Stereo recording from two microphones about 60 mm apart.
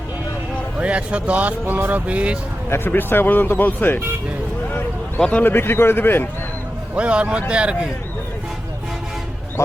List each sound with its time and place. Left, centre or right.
0.8 s speech: right
2.6 s speech: left
5.4 s speech: left
6.9 s speech: centre